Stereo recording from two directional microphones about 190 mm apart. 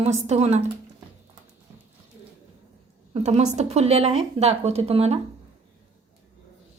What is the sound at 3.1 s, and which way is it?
A woman's voice, 35° right (ahead or behind).